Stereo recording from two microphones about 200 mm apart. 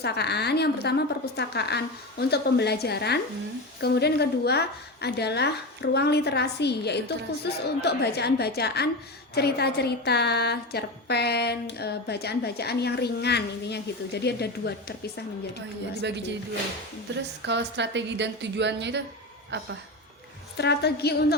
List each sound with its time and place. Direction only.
0.0 s a woman's voice: 55° left (ahead or behind)
16.0 s a woman's voice: 60° right (ahead or behind)
17.4 s a woman's voice: 60° right (ahead or behind)
20.6 s a woman's voice: 55° left (ahead or behind)